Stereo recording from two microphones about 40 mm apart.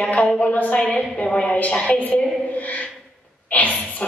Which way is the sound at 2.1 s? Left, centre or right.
Left.